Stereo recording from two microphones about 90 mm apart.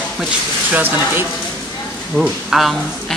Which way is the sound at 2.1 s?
Centre (ahead or behind).